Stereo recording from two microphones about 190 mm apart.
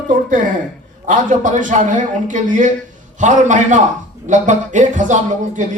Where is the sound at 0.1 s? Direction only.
40° right (ahead or behind).